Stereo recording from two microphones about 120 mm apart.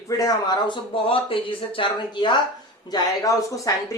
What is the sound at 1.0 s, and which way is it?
Speech, 50° left (ahead or behind).